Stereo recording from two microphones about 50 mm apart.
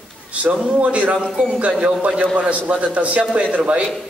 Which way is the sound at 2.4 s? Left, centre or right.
Right.